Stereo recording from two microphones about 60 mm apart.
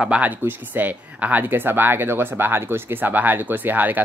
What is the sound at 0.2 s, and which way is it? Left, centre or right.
Speech, right.